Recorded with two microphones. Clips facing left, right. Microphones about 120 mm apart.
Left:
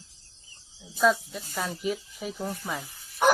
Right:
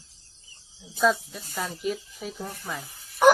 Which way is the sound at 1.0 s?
Centre (ahead or behind).